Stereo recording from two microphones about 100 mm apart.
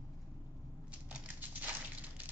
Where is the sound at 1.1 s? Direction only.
15° right (ahead or behind).